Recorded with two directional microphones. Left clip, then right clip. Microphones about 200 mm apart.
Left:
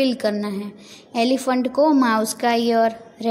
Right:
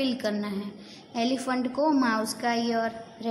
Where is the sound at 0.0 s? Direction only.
30° left (ahead or behind).